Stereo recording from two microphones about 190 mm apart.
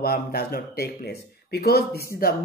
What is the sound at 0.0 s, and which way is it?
Speech, 55° left (ahead or behind).